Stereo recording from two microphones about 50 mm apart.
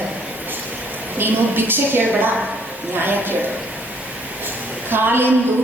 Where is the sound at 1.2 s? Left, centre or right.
Right.